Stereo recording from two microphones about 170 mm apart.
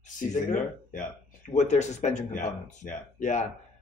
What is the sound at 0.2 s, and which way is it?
Speech, 45° left (ahead or behind).